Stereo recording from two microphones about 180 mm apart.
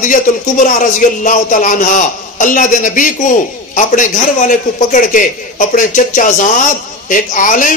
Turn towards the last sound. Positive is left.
turn(degrees=45)  # may be behind; listen again after turning